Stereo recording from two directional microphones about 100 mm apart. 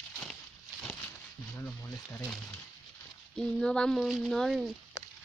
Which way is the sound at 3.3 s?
5° left (ahead or behind).